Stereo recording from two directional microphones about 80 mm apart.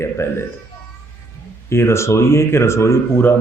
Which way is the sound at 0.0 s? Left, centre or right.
Left.